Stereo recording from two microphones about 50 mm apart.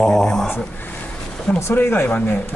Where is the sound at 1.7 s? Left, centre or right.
Left.